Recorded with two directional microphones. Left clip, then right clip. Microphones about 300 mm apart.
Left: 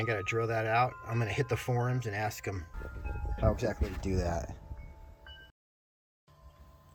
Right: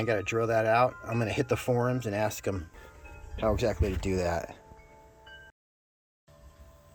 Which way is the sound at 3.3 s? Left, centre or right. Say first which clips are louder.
Right 4 dB; centre.